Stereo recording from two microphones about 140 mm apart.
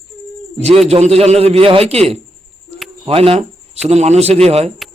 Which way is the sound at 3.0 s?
40° right (ahead or behind).